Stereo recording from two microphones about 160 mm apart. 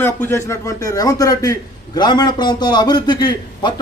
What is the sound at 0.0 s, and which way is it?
A man's voice, 15° left (ahead or behind).